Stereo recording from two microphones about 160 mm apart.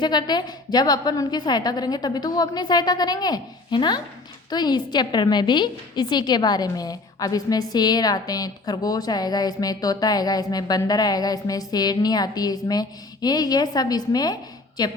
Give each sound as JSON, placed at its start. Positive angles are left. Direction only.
{"t": 0.0, "sound": "a woman's voice", "side_deg": 25}